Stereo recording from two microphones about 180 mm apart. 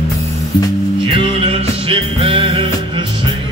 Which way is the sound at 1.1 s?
30° right (ahead or behind).